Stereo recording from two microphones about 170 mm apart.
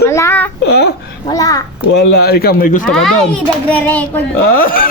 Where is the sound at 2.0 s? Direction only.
70° left (ahead or behind).